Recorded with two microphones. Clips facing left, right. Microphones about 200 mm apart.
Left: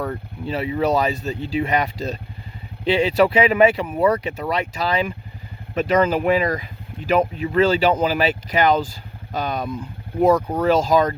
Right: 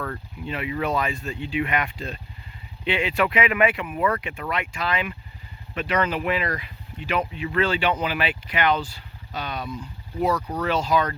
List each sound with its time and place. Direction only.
0.4 s speech: 35° left (ahead or behind)